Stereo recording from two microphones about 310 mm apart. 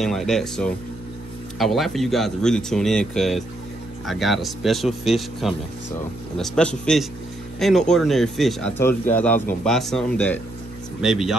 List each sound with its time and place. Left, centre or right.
0.0 s a man's voice: centre